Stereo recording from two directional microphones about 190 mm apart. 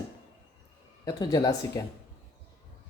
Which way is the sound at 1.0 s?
20° left (ahead or behind).